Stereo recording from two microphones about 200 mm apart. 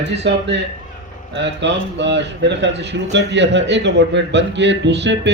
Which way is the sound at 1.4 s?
60° right (ahead or behind).